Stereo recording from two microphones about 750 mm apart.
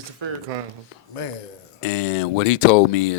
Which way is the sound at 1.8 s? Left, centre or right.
Left.